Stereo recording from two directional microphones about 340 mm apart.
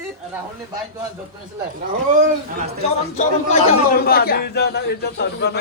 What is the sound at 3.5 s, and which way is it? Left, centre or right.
A man's voice, left.